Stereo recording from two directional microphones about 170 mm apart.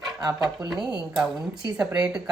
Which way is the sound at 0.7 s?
5° right (ahead or behind).